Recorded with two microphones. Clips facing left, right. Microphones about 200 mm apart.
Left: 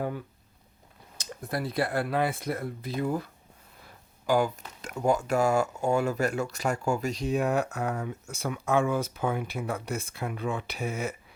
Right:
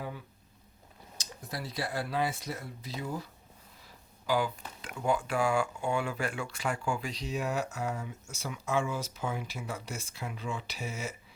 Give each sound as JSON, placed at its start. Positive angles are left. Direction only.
{"t": 1.2, "sound": "speech", "side_deg": 55}